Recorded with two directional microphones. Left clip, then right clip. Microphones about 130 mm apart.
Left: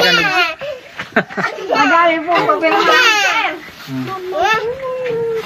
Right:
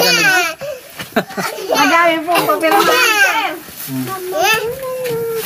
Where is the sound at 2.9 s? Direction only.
40° right (ahead or behind).